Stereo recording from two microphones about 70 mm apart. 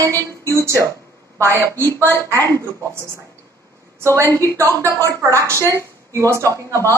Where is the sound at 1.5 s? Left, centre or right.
Left.